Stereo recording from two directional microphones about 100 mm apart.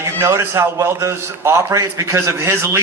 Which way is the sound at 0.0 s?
30° right (ahead or behind).